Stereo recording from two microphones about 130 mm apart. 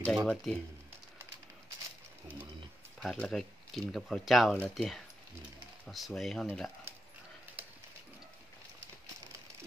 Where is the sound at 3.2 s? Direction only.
Centre (ahead or behind).